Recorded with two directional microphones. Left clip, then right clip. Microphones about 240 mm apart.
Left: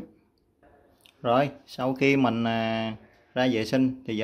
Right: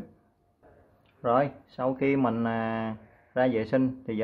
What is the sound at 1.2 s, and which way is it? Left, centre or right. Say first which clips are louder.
Speech: left 1 dB; left.